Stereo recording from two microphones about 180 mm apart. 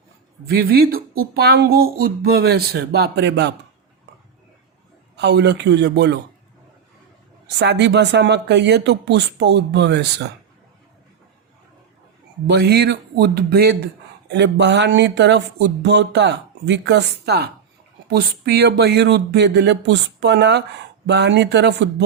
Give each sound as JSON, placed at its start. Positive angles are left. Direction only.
{"t": 0.4, "sound": "speech", "side_deg": -60}
{"t": 5.1, "sound": "speech", "side_deg": -70}
{"t": 7.4, "sound": "speech", "side_deg": -70}
{"t": 12.5, "sound": "speech", "side_deg": -65}